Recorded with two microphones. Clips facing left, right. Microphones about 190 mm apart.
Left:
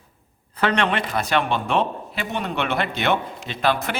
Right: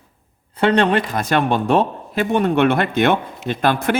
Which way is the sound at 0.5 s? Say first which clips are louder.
Right 6 dB; 30° right (ahead or behind).